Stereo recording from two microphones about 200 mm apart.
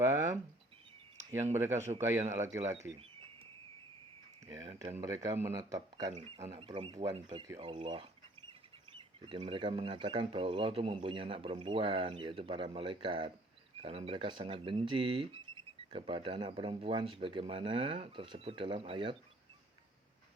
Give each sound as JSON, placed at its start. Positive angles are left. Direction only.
{"t": 0.0, "sound": "speech", "side_deg": -15}
{"t": 1.5, "sound": "speech", "side_deg": -15}
{"t": 4.4, "sound": "speech", "side_deg": -20}